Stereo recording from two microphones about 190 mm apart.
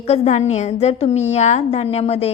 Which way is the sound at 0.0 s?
35° left (ahead or behind).